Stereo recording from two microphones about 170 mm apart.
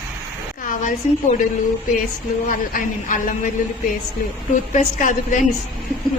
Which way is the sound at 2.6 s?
50° left (ahead or behind).